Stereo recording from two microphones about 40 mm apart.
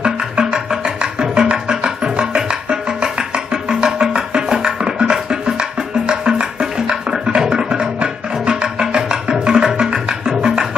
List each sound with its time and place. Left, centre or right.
0.0 s music: right